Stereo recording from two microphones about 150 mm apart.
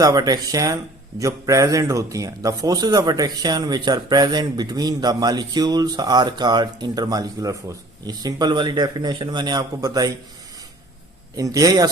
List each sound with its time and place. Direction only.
0.0 s a man's voice: 25° right (ahead or behind)
11.3 s a man's voice: 25° right (ahead or behind)